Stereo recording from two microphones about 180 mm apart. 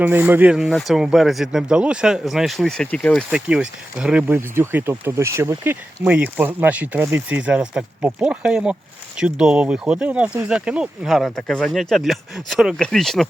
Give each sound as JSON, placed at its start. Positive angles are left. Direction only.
{"t": 0.0, "sound": "speech", "side_deg": -10}
{"t": 3.2, "sound": "speech", "side_deg": -5}